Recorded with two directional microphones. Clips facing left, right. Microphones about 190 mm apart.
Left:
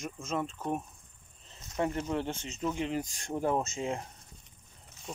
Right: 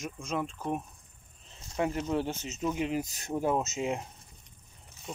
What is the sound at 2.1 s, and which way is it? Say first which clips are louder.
Speech: right 2 dB; 5° right (ahead or behind).